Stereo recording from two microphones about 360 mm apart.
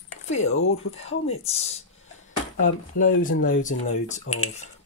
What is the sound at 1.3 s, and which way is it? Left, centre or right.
Speech, centre.